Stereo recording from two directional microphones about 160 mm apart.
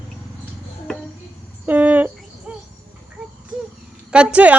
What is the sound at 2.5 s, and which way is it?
Bird, 5° right (ahead or behind).